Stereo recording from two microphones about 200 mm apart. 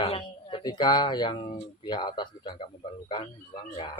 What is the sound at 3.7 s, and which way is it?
Speech, 30° left (ahead or behind).